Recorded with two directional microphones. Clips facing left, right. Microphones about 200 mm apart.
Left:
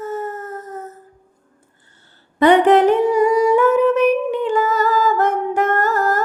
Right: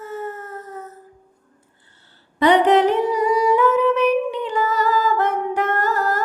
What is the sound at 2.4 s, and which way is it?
Humming, 50° left (ahead or behind).